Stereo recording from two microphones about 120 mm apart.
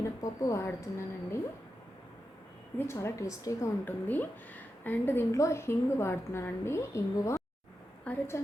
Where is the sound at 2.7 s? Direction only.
20° left (ahead or behind).